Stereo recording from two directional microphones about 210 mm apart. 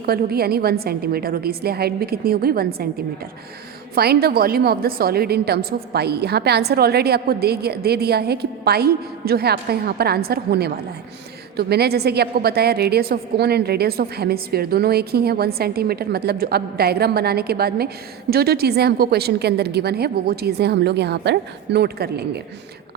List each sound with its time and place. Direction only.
0.0 s a woman's voice: 45° right (ahead or behind)
3.9 s a woman's voice: 50° right (ahead or behind)